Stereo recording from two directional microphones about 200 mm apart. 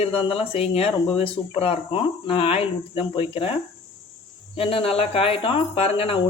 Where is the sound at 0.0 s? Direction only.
30° left (ahead or behind).